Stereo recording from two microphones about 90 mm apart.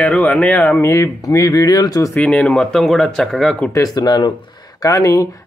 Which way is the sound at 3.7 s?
45° left (ahead or behind).